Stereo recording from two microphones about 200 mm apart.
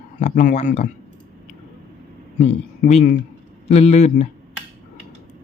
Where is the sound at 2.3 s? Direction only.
35° left (ahead or behind).